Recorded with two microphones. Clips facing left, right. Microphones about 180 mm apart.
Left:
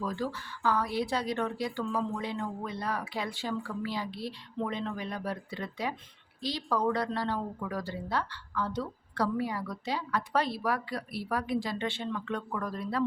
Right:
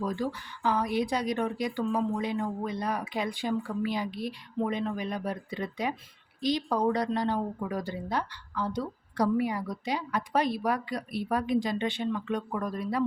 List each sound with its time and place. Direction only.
0.0 s speech: 15° right (ahead or behind)